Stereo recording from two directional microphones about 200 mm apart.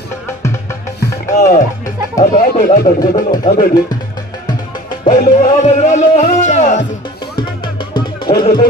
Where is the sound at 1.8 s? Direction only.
40° left (ahead or behind).